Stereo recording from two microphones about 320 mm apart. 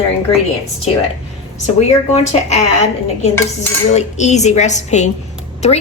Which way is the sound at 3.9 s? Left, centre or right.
Left.